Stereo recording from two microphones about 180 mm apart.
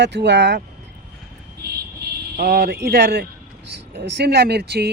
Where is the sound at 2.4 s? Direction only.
60° right (ahead or behind).